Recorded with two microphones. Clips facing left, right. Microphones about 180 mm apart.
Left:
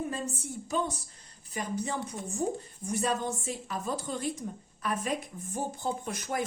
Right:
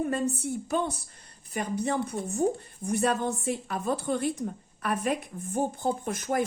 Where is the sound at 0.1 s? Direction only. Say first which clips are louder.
Right 7 dB; 60° right (ahead or behind).